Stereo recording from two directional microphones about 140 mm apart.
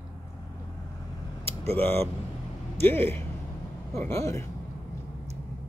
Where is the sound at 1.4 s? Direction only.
45° right (ahead or behind).